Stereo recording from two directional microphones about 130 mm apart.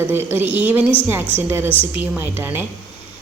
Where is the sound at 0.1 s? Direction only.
15° right (ahead or behind).